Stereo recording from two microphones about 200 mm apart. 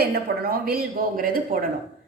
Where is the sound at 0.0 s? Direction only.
50° right (ahead or behind).